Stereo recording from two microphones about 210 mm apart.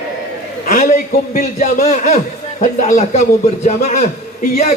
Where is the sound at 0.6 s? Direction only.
35° left (ahead or behind).